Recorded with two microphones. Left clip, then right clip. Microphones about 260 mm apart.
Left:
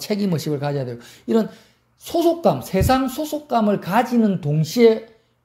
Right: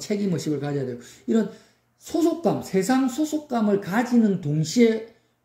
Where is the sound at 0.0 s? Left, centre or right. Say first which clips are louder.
Left 3 dB; left.